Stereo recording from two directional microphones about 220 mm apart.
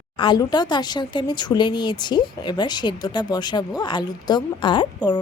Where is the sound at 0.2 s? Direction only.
20° left (ahead or behind).